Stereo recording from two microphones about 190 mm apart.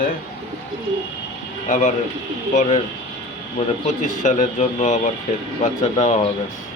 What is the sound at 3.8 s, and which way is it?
Speech, 40° left (ahead or behind).